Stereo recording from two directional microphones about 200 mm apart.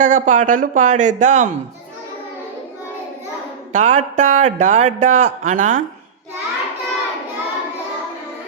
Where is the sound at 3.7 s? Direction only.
35° right (ahead or behind).